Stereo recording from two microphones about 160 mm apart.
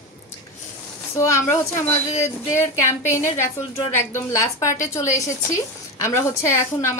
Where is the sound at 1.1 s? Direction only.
20° left (ahead or behind).